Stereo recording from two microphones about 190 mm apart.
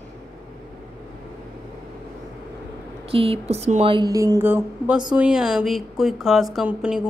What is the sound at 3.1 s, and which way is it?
Speech, 30° right (ahead or behind).